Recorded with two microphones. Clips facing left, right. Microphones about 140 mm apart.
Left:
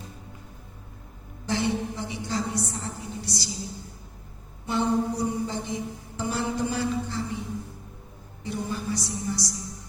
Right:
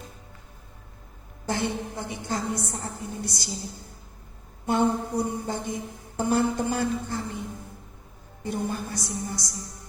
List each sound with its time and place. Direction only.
1.5 s music: 50° right (ahead or behind)
4.6 s music: 50° right (ahead or behind)
8.4 s music: 50° right (ahead or behind)